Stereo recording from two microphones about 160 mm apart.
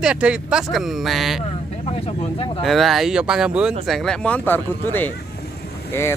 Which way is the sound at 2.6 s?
Centre (ahead or behind).